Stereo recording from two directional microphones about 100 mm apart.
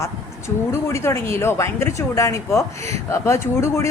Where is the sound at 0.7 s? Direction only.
25° left (ahead or behind).